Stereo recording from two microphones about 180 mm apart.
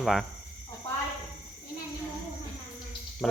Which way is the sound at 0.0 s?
Centre (ahead or behind).